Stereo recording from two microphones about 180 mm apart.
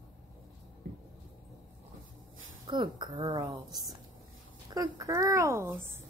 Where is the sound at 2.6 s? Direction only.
25° right (ahead or behind).